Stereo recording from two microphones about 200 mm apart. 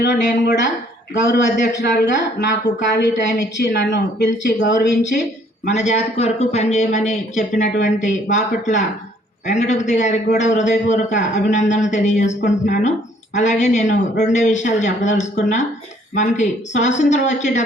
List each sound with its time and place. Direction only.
0.1 s speech: 55° left (ahead or behind)
1.8 s speech: 60° left (ahead or behind)
5.7 s speech: 35° left (ahead or behind)